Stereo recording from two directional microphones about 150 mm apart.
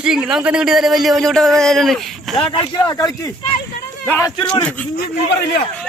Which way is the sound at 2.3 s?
25° left (ahead or behind).